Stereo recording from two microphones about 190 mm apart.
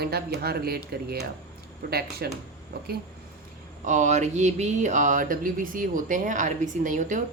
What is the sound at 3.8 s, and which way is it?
Speech, 40° right (ahead or behind).